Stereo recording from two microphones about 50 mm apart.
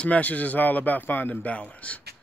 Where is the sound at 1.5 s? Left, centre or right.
Left.